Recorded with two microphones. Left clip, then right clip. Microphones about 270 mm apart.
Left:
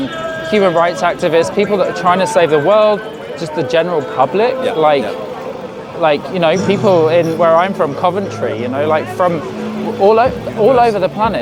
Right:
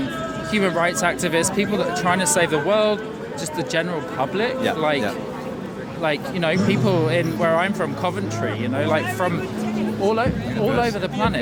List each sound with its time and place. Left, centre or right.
0.5 s speech: centre